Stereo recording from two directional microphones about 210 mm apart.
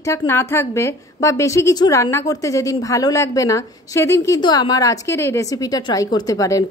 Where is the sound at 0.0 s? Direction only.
15° left (ahead or behind).